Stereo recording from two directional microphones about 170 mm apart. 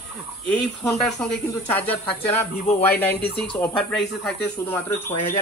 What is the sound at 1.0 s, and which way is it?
Speech, 5° left (ahead or behind).